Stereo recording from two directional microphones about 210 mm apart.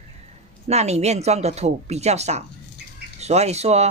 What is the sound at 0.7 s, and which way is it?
Speech, 30° right (ahead or behind).